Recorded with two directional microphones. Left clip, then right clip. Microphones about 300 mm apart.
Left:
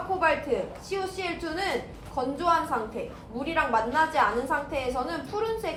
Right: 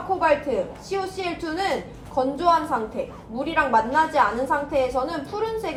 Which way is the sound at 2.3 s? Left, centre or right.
Right.